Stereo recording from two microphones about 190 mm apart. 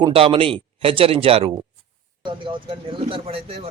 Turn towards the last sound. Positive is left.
turn(degrees=-30)  # may be behind; listen again after turning